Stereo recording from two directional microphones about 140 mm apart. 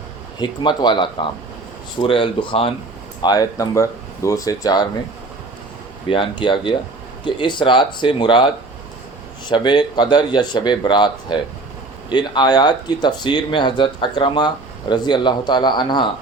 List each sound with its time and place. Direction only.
0.3 s speech: 35° left (ahead or behind)
3.2 s speech: 30° left (ahead or behind)
6.1 s speech: 35° left (ahead or behind)